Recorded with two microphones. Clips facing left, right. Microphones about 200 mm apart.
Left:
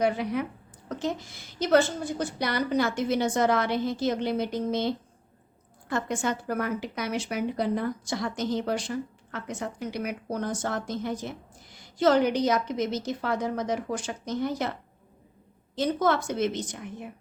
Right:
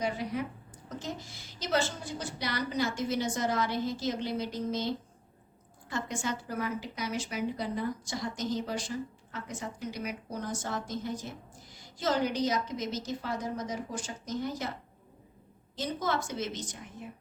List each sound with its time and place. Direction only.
0.0 s a woman's voice: 65° left (ahead or behind)
5.9 s a woman's voice: 55° left (ahead or behind)
15.7 s a woman's voice: 60° left (ahead or behind)